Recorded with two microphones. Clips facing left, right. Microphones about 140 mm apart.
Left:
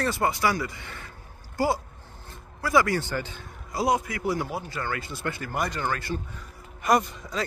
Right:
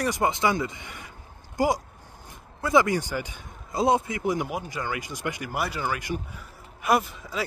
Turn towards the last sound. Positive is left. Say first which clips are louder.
# left 1 dB
turn(degrees=-5)  # may be behind; listen again after turning